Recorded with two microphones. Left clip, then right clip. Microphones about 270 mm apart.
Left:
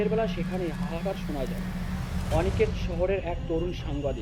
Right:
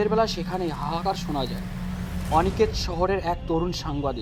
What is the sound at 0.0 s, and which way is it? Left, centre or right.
Speech, right.